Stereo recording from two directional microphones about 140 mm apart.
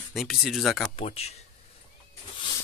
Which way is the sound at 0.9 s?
45° left (ahead or behind).